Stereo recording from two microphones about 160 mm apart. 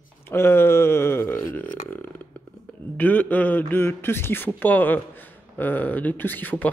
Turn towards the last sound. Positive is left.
turn(degrees=10)  # may be behind; listen again after turning